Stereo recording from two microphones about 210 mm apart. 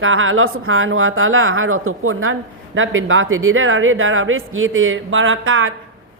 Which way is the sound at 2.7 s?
70° right (ahead or behind).